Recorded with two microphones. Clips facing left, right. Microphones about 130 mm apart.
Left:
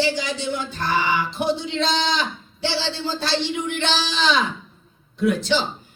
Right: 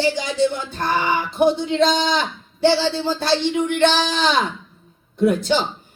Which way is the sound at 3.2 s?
50° right (ahead or behind).